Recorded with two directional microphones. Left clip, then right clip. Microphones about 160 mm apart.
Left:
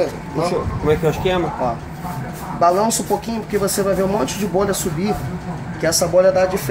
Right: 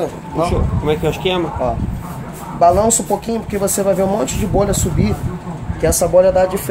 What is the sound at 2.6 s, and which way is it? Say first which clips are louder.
Speech: right 4 dB; 35° right (ahead or behind).